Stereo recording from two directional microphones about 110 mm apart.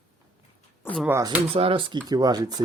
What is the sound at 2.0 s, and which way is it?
Speech, 35° right (ahead or behind).